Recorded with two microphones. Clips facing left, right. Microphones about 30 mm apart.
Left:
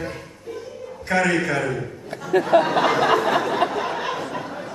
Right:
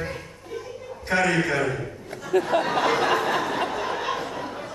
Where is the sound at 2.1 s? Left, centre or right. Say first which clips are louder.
Left 2 dB; left.